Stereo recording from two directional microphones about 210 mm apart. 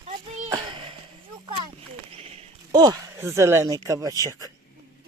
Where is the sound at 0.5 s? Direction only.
20° right (ahead or behind).